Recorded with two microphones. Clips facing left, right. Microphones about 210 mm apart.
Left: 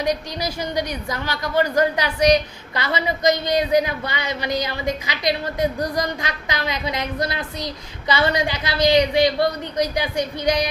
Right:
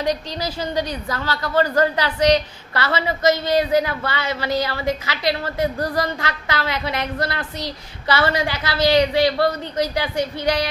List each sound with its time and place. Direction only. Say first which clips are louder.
0.0 s a woman's voice: even; 15° left (ahead or behind)